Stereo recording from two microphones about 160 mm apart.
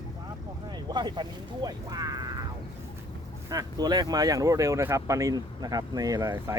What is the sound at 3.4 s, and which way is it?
Speech, 25° right (ahead or behind).